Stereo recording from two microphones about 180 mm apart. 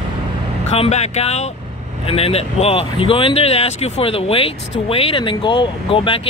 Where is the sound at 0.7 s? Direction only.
35° left (ahead or behind).